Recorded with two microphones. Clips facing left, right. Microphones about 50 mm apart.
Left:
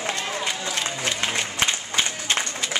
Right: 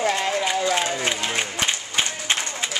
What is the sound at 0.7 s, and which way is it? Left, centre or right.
Applause, right.